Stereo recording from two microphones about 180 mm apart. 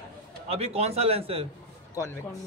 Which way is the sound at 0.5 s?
35° right (ahead or behind).